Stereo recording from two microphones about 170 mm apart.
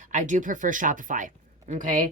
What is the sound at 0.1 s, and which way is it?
A woman's voice, 45° right (ahead or behind).